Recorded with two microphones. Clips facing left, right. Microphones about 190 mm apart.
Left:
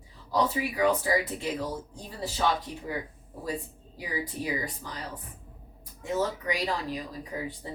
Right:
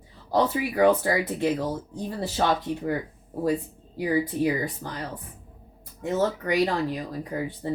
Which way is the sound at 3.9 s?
55° right (ahead or behind).